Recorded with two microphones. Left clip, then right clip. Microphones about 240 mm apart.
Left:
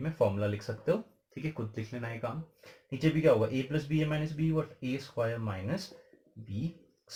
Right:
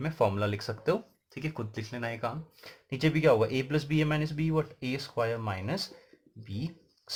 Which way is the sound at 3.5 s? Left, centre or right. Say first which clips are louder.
Right 3 dB; right.